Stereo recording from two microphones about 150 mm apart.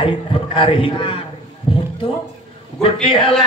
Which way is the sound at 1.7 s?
35° left (ahead or behind).